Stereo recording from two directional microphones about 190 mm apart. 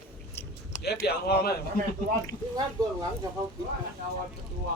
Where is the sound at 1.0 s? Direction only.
55° left (ahead or behind).